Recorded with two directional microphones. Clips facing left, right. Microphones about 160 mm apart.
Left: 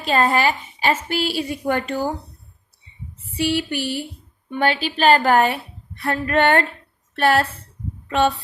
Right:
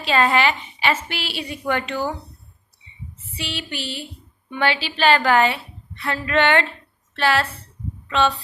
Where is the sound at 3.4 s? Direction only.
55° left (ahead or behind).